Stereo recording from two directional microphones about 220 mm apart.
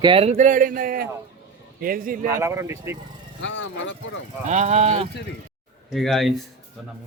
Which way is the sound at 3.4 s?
55° left (ahead or behind).